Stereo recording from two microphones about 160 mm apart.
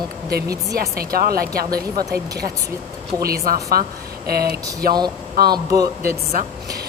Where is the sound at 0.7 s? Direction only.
70° right (ahead or behind).